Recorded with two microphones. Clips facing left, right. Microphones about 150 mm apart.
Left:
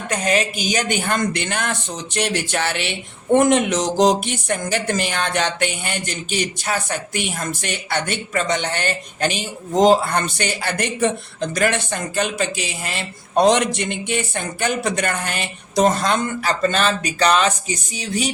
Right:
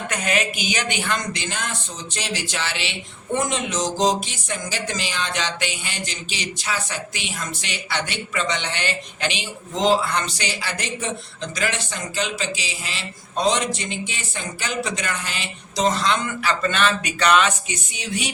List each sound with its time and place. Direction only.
0.1 s a woman's voice: 35° left (ahead or behind)